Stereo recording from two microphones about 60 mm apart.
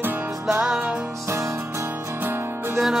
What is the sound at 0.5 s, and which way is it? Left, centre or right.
Music, centre.